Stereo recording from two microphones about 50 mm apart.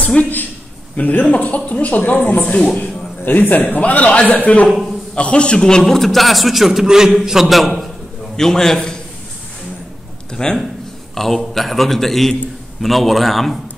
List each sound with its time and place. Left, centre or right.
0.0 s a man's voice: left
2.6 s a woman's voice: centre
3.3 s a man's voice: left
4.6 s a man's voice: centre
5.1 s a man's voice: left; by 7.9 s centre
8.4 s a man's voice: centre
10.3 s a man's voice: centre